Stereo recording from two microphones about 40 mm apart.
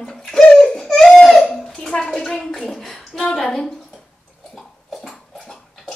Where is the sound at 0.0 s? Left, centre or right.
Centre.